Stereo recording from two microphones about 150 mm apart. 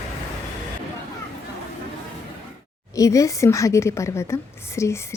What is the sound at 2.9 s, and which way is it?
A woman's voice, 20° left (ahead or behind).